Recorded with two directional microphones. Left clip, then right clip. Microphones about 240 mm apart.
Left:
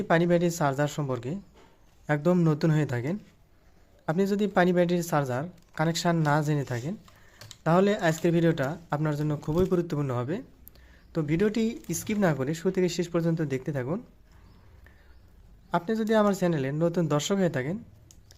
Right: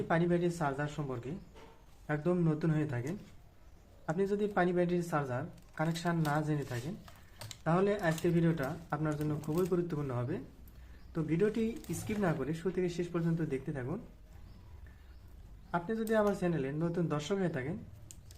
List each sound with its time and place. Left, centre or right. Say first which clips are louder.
0.1 s speech: left 9 dB; left
15.7 s speech: left 7 dB; left